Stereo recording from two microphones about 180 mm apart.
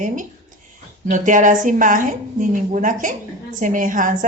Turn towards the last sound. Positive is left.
turn(degrees=-45)  # may be behind; listen again after turning